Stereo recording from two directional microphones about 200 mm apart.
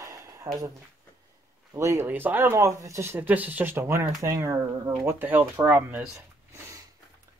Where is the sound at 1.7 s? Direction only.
15° right (ahead or behind).